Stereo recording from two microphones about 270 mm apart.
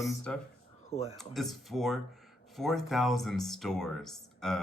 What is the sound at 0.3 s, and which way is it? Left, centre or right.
Speech, centre.